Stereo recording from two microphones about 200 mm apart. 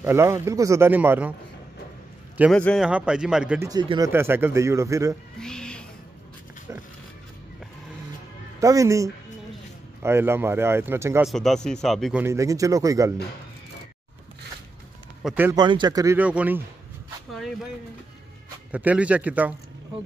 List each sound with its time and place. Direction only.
0.0 s speech: 10° right (ahead or behind)
2.5 s a man's voice: 5° left (ahead or behind)
3.6 s speech: 20° right (ahead or behind)
5.4 s owl: 5° left (ahead or behind)
6.7 s speech: 15° right (ahead or behind)
8.5 s speech: 15° right (ahead or behind)
11.2 s a man's voice: centre (ahead or behind)
12.2 s speech: 15° right (ahead or behind)
15.2 s speech: 10° right (ahead or behind)
15.5 s speech: 20° right (ahead or behind)
18.7 s speech: 5° right (ahead or behind)